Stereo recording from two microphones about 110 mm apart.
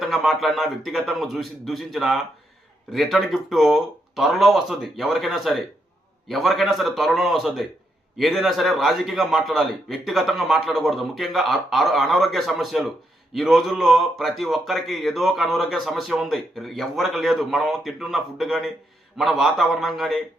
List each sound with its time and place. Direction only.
0.0 s speech: centre (ahead or behind)